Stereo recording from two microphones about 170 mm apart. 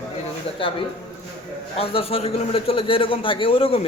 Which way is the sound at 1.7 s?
35° left (ahead or behind).